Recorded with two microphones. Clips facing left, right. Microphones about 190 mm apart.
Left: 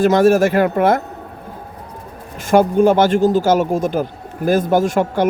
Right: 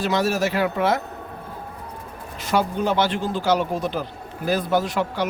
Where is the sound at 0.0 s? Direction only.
50° left (ahead or behind).